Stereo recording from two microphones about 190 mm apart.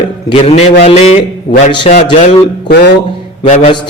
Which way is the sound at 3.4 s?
40° left (ahead or behind).